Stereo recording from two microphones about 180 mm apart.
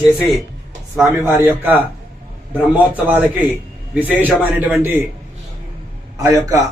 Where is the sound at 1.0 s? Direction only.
15° right (ahead or behind).